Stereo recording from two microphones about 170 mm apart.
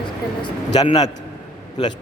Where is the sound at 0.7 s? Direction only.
25° left (ahead or behind).